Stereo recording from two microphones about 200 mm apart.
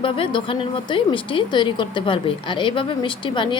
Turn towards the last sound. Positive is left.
turn(degrees=25)  # may be behind; listen again after turning